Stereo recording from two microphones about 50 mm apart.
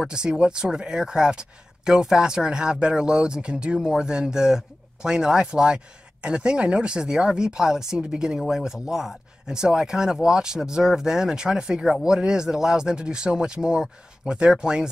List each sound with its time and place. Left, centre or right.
0.1 s speech: centre